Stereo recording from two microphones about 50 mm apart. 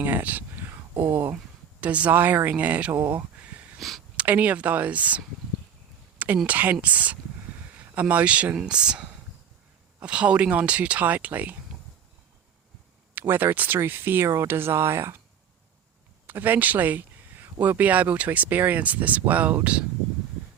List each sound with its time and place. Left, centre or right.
0.0 s a sound: right
0.7 s a sound: right
1.8 s speech: right
3.1 s a sound: right
3.8 s speech: centre
4.2 s speech: right
8.5 s speech: centre; by 11.5 s right
13.1 s speech: right
16.2 s speech: right